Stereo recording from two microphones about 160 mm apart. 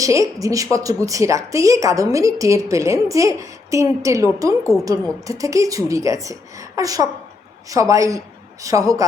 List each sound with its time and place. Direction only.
0.0 s a woman's voice: 20° right (ahead or behind)